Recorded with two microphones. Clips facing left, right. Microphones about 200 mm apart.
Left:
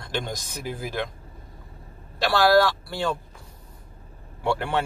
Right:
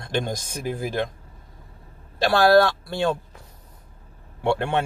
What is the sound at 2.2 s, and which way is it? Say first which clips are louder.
Speech: right 2 dB; 20° right (ahead or behind).